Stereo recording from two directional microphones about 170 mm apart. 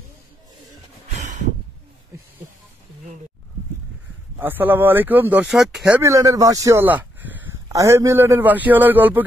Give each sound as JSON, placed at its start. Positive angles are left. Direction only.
{"t": 1.1, "sound": "a sound", "side_deg": -45}
{"t": 4.4, "sound": "speech", "side_deg": -10}
{"t": 5.9, "sound": "speech", "side_deg": -20}